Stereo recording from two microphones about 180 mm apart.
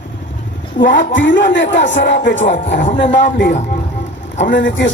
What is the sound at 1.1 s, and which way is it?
Speech, 90° left.